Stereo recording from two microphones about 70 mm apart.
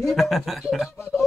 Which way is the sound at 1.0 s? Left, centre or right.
Left.